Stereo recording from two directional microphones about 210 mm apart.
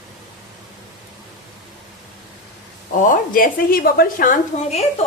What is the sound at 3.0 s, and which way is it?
A woman's voice, 40° left (ahead or behind).